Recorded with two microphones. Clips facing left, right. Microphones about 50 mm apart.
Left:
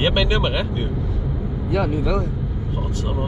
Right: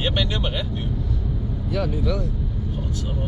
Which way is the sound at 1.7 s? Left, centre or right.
Left.